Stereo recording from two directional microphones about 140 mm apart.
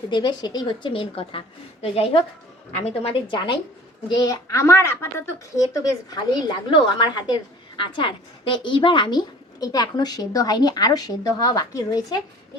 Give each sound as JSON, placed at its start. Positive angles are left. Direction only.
{"t": 0.1, "sound": "a woman's voice", "side_deg": 35}